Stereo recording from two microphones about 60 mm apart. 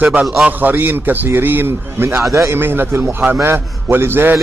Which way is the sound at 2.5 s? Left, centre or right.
Right.